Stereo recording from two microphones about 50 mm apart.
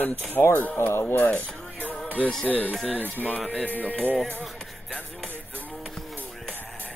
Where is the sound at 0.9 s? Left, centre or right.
Left.